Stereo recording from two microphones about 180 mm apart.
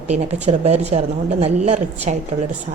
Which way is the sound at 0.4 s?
35° right (ahead or behind).